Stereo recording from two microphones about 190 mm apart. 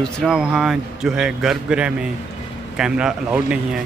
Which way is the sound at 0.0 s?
Centre (ahead or behind).